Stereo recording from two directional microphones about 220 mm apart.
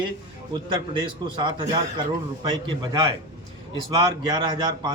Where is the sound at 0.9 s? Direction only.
20° right (ahead or behind).